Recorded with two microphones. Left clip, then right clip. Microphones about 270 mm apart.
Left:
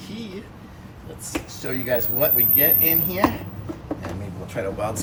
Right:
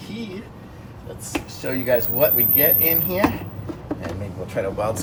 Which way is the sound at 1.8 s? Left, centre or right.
Centre.